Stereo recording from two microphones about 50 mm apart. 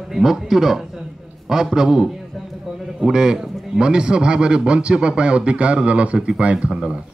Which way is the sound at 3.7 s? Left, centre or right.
Centre.